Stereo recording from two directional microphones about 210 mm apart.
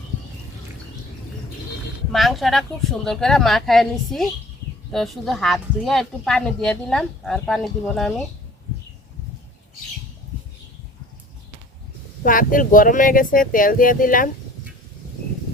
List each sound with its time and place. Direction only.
2.1 s a woman's voice: centre (ahead or behind)
12.2 s speech: 40° left (ahead or behind)